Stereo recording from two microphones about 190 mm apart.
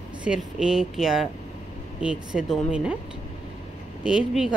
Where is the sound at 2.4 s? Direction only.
5° right (ahead or behind).